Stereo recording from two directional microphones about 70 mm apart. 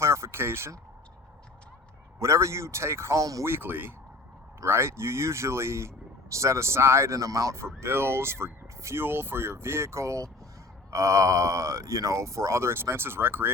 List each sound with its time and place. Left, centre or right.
0.0 s a sound: right
2.1 s speech: right
3.4 s speech: right